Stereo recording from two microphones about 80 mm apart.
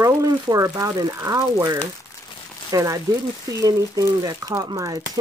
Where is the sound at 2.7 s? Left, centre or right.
Right.